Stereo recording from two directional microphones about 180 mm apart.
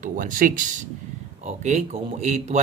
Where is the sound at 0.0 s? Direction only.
50° right (ahead or behind).